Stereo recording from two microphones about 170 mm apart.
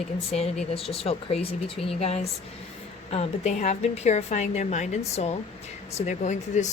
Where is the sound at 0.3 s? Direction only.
35° left (ahead or behind).